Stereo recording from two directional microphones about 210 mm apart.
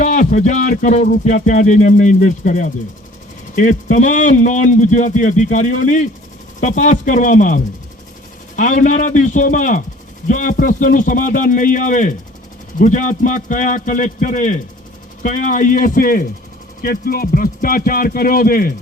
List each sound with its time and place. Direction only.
0.0 s speech: 35° left (ahead or behind)